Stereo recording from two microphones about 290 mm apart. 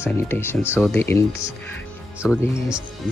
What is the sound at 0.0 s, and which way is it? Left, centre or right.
Speech, centre.